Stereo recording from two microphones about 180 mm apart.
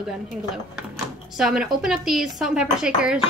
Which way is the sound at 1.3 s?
5° right (ahead or behind).